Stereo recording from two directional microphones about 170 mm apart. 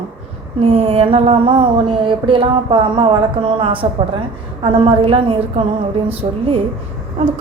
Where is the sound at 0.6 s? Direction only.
35° right (ahead or behind).